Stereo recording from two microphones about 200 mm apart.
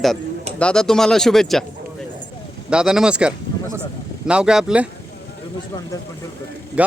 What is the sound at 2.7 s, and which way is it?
Speech, 5° right (ahead or behind).